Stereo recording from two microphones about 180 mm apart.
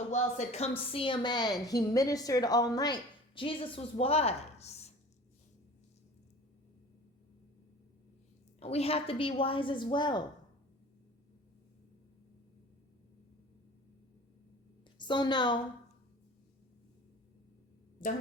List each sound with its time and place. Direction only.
0.1 s a woman's voice: 40° left (ahead or behind)
8.5 s a woman's voice: 35° left (ahead or behind)
14.9 s a woman's voice: 25° left (ahead or behind)